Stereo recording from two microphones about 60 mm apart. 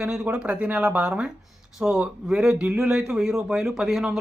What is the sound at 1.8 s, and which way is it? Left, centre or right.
Speech, centre.